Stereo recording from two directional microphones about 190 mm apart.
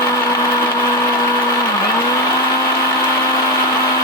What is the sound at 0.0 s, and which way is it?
Blender, 15° left (ahead or behind).